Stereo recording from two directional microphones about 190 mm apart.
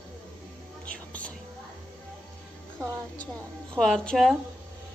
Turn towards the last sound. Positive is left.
turn(degrees=5)  # may be behind; listen again after turning